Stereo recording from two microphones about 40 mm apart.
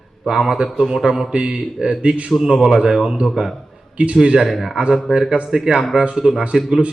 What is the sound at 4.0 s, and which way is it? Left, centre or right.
Speech, right.